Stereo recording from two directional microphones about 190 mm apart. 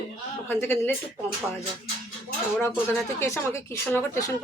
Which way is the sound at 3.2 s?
15° left (ahead or behind).